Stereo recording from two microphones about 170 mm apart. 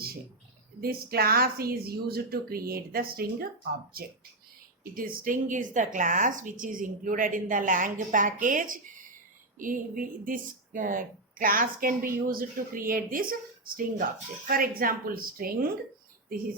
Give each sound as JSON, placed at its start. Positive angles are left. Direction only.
{"t": 0.8, "sound": "a woman's voice", "side_deg": -60}